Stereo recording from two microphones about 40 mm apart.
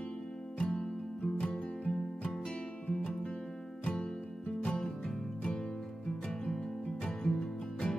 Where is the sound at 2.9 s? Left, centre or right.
Centre.